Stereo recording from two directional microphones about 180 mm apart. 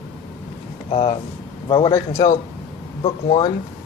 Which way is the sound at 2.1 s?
40° left (ahead or behind).